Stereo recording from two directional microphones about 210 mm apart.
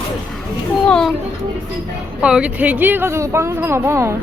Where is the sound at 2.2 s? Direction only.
5° right (ahead or behind).